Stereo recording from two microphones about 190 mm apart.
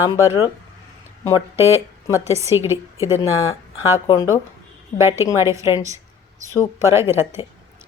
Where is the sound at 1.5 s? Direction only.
15° right (ahead or behind).